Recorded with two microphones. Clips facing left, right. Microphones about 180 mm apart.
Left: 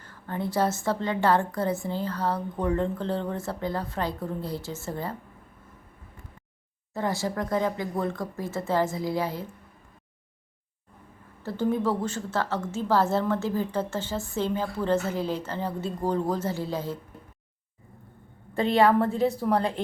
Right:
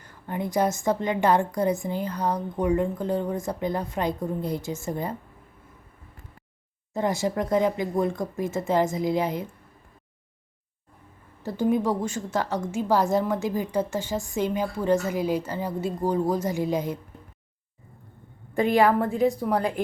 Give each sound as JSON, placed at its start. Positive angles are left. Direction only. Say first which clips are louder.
{"t": 0.0, "sound": "a woman's voice", "louder": "right 1 dB", "side_deg": -15}
{"t": 6.9, "sound": "a woman's voice", "louder": "right 3 dB", "side_deg": -20}
{"t": 11.4, "sound": "a woman's voice", "louder": "right 2 dB", "side_deg": -15}
{"t": 18.9, "sound": "a woman's voice", "louder": "right 1 dB", "side_deg": -15}
{"t": 19.5, "sound": "speech", "louder": "right 1 dB", "side_deg": 30}